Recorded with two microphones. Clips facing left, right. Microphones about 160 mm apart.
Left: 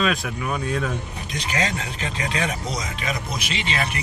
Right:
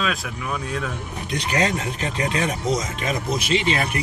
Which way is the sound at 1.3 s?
55° right (ahead or behind).